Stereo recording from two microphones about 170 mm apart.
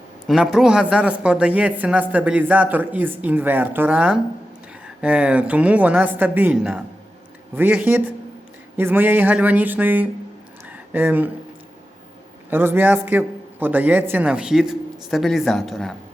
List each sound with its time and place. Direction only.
0.3 s speech: 5° right (ahead or behind)
10.7 s a sound: 10° right (ahead or behind)
12.5 s a woman's voice: 10° right (ahead or behind)